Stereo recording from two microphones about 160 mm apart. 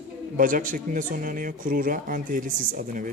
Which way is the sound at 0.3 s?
60° right (ahead or behind).